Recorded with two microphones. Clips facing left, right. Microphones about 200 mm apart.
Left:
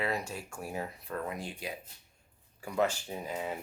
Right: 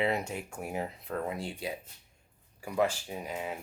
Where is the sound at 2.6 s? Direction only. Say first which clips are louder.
Right 1 dB; 10° right (ahead or behind).